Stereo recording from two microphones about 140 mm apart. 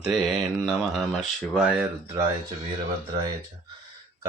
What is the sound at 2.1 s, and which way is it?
Speech, 25° right (ahead or behind).